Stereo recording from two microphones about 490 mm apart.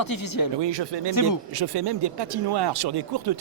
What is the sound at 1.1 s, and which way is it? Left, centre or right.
Speech, left.